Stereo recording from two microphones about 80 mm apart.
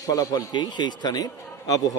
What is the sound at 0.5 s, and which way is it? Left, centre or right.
Speech, left.